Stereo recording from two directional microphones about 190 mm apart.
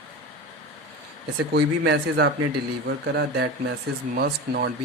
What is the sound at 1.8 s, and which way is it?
Speech, 60° right (ahead or behind).